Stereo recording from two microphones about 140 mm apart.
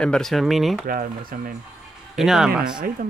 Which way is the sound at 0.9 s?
90° right.